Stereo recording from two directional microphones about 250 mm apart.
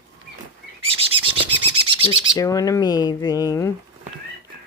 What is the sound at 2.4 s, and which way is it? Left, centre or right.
Speech, centre.